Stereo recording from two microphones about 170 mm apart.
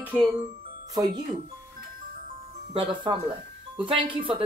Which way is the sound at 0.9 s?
25° right (ahead or behind).